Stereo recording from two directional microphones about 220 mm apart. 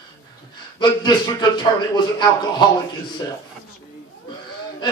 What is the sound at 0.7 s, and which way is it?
Speech, 20° left (ahead or behind).